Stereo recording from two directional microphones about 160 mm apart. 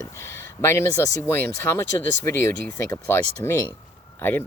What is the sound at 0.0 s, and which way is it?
Speech, 15° left (ahead or behind).